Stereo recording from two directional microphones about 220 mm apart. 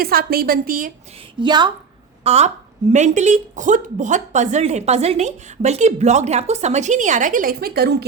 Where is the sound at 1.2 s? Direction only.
20° right (ahead or behind).